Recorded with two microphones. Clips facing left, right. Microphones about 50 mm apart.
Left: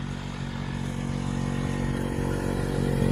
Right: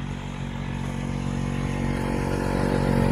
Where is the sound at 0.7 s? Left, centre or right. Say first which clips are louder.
Right 2 dB; right.